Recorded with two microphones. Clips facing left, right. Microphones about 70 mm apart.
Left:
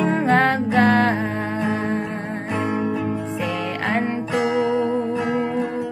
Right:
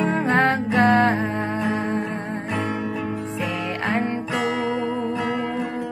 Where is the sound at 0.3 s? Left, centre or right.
Right.